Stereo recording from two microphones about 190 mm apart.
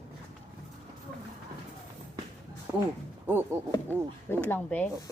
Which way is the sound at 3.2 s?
10° right (ahead or behind).